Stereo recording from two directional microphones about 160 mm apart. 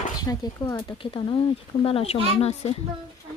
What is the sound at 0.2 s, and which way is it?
Speech, 25° left (ahead or behind).